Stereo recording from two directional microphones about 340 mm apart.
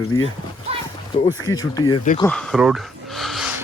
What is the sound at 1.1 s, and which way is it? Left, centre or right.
Speech, centre.